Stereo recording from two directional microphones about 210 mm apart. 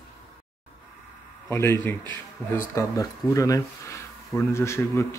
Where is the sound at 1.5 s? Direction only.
10° left (ahead or behind).